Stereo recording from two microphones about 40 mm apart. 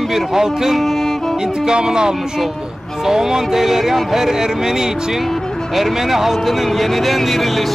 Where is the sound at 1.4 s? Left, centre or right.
Centre.